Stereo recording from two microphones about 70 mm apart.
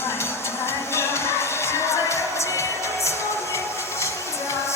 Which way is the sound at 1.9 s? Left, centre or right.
Left.